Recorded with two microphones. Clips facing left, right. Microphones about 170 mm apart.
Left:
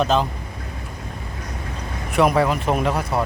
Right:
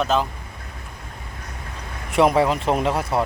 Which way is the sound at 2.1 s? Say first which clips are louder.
Right 1 dB; 25° right (ahead or behind).